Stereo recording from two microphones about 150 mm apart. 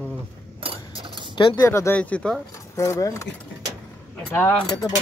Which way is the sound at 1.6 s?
20° left (ahead or behind).